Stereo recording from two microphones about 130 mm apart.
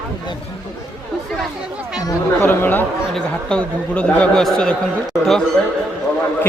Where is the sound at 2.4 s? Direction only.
15° left (ahead or behind).